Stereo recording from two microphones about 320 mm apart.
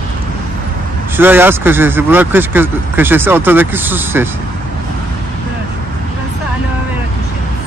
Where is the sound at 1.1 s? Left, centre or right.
Centre.